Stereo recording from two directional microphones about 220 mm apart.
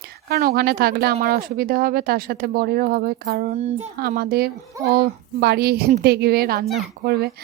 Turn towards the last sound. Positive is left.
turn(degrees=-45)  # may be behind; listen again after turning